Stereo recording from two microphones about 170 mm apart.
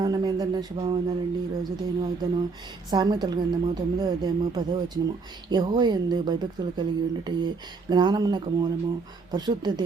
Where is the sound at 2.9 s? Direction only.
25° right (ahead or behind).